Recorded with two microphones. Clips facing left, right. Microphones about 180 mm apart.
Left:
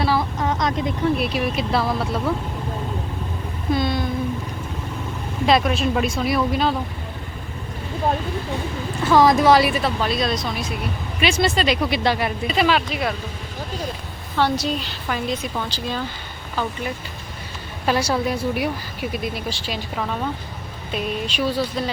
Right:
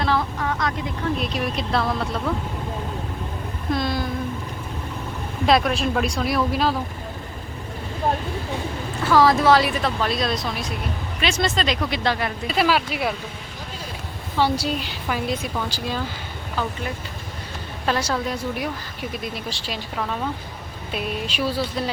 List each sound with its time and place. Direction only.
0.0 s vehicle: 5° left (ahead or behind)
0.3 s vehicle: 20° left (ahead or behind)
1.1 s speech: 5° left (ahead or behind)
3.7 s a sound: centre (ahead or behind)
5.5 s speech: centre (ahead or behind)
9.0 s speech: 20° left (ahead or behind)
12.5 s speech: 5° right (ahead or behind)
14.6 s speech: 10° right (ahead or behind)
17.8 s speech: 10° left (ahead or behind)